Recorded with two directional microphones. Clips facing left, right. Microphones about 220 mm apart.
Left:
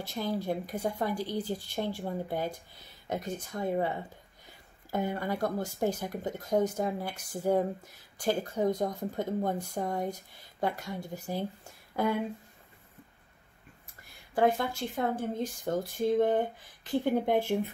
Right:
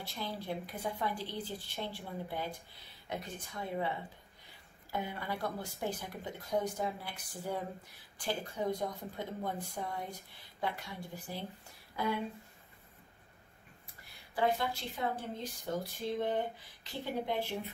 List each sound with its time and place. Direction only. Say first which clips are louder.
0.0 s speech: left 8 dB; 45° left (ahead or behind)
4.9 s a woman's voice: left 7 dB; 45° left (ahead or behind)
14.3 s speech: left 6 dB; 50° left (ahead or behind)